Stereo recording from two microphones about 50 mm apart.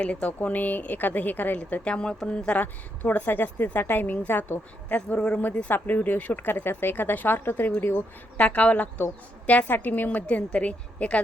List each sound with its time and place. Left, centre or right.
0.0 s speech: left
1.5 s a woman's voice: left
3.0 s speech: left
4.9 s a woman's voice: left
5.6 s speech: left
8.4 s a woman's voice: left